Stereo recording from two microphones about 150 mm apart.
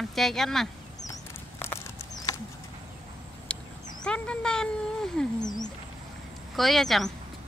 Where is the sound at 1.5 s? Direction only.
15° left (ahead or behind).